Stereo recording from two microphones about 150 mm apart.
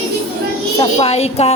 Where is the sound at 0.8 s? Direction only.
40° left (ahead or behind).